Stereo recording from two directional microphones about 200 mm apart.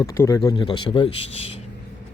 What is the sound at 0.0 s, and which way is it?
Speech, 15° left (ahead or behind).